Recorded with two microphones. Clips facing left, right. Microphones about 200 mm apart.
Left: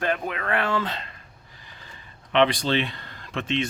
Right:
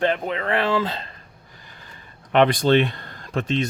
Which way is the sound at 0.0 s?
25° right (ahead or behind).